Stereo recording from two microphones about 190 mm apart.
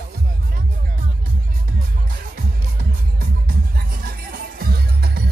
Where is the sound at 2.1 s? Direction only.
50° right (ahead or behind).